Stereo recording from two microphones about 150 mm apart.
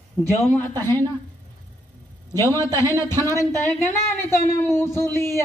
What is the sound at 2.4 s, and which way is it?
A man's voice, 20° left (ahead or behind).